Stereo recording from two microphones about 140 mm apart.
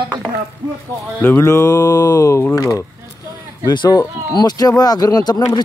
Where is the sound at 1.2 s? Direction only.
15° left (ahead or behind).